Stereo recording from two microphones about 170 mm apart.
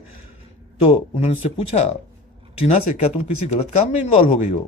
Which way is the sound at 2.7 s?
35° left (ahead or behind).